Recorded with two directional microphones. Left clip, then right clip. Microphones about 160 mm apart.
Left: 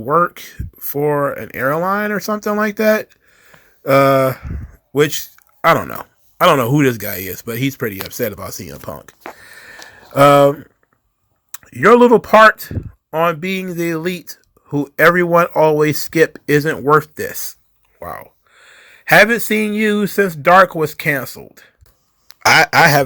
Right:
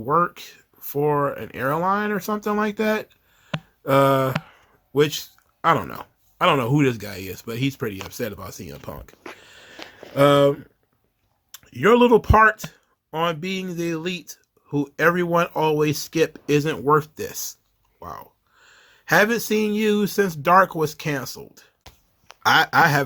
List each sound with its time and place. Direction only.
0.0 s speech: 20° left (ahead or behind)
9.7 s a sound: 40° left (ahead or behind)
11.7 s speech: 25° left (ahead or behind)
18.0 s a sound: 25° left (ahead or behind)
19.5 s speech: 20° left (ahead or behind)
22.4 s speech: 25° left (ahead or behind)